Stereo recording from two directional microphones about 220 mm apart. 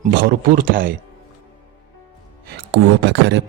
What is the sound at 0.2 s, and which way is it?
Speech, 40° right (ahead or behind).